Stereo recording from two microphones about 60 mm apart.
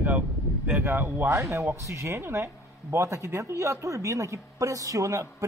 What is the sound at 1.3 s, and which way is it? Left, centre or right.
Speech, right.